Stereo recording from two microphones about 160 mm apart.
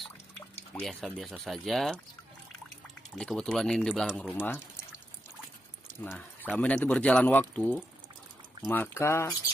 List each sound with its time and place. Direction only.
0.7 s speech: 5° left (ahead or behind)
3.2 s speech: 5° left (ahead or behind)
5.9 s speech: 10° left (ahead or behind)